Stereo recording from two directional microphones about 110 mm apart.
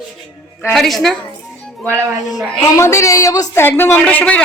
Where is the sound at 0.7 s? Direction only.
Centre (ahead or behind).